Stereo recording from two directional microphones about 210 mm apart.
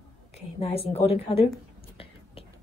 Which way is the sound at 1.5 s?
25° left (ahead or behind).